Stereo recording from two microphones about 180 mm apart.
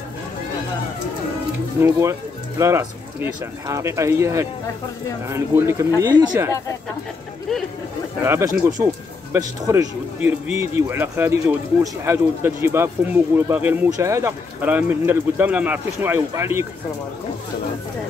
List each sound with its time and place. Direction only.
1.8 s speech: 15° right (ahead or behind)
8.2 s speech: 15° right (ahead or behind)